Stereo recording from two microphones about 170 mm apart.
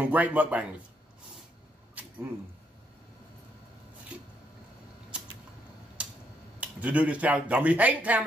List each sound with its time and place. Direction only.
0.0 s speech: 10° right (ahead or behind)
6.6 s speech: 10° right (ahead or behind)